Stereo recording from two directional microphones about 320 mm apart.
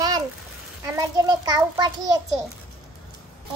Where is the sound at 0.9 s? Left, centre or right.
Centre.